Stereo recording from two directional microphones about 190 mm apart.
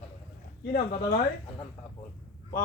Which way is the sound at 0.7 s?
50° left (ahead or behind).